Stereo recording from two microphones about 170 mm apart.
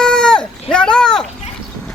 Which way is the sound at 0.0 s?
5° left (ahead or behind).